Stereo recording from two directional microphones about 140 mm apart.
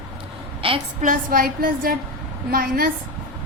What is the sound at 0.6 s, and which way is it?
Speech, 40° right (ahead or behind).